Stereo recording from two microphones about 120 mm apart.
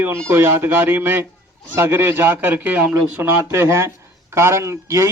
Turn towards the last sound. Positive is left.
turn(degrees=-25)  # may be behind; listen again after turning